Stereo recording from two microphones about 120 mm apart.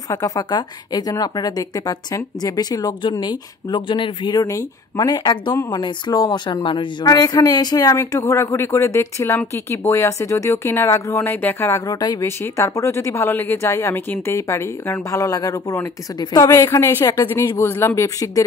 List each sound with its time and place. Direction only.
0.1 s speech: 35° left (ahead or behind)
4.4 s speech: 25° left (ahead or behind)
4.9 s speech: 40° left (ahead or behind)